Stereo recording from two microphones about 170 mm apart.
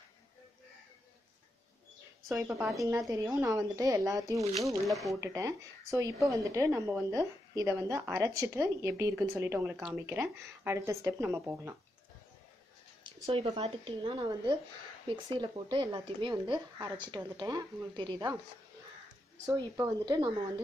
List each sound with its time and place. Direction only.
2.3 s a woman's voice: 15° right (ahead or behind)
13.0 s a woman's voice: 30° right (ahead or behind)
19.5 s a woman's voice: 25° right (ahead or behind)